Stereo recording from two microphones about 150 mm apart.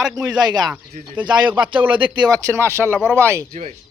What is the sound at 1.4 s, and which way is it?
Speech, 10° right (ahead or behind).